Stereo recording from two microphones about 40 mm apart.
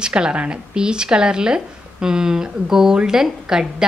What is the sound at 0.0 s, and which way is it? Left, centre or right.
A woman's voice, right.